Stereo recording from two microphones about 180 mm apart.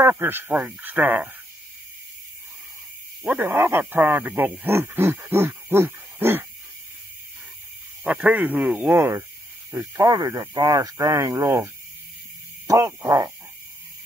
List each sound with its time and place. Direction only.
0.0 s speech: 10° right (ahead or behind)
3.3 s speech: 10° right (ahead or behind)
8.0 s speech: 10° right (ahead or behind)